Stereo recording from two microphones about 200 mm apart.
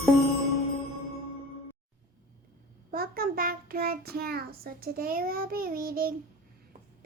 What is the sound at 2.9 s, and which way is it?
Child singing, 45° right (ahead or behind).